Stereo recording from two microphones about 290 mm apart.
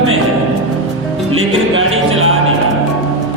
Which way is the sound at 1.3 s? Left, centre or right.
Right.